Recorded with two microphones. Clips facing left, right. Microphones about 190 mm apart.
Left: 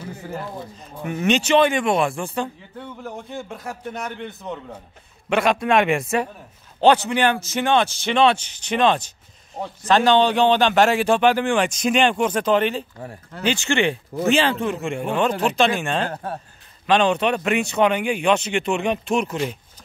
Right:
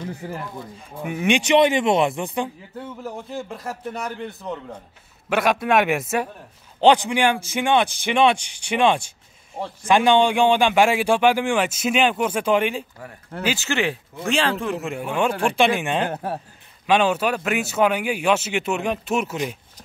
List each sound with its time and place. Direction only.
1.0 s a man's voice: 10° right (ahead or behind)
3.0 s a man's voice: centre (ahead or behind)
6.8 s a man's voice: 15° right (ahead or behind)